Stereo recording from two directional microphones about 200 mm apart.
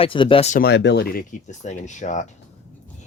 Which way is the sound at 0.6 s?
55° left (ahead or behind).